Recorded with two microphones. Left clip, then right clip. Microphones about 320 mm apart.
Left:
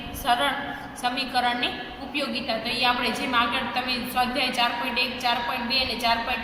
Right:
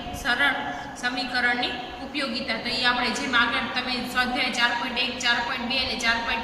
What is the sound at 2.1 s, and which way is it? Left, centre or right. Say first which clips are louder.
A woman's voice: left 1 dB; centre.